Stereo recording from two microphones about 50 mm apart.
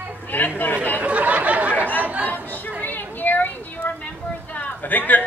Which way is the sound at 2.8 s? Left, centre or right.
Left.